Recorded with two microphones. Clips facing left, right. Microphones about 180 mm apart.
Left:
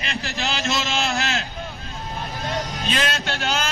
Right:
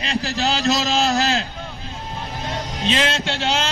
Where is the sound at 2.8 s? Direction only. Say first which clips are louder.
Right 8 dB; 25° right (ahead or behind).